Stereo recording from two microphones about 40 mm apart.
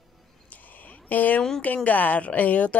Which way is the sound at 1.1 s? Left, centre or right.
Left.